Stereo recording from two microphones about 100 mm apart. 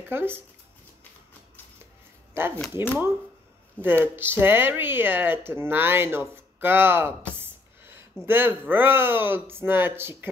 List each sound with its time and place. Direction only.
0.1 s speech: 20° right (ahead or behind)
2.3 s speech: 25° right (ahead or behind)
3.8 s speech: 20° right (ahead or behind)